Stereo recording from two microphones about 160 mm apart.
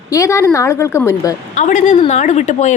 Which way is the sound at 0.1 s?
20° left (ahead or behind).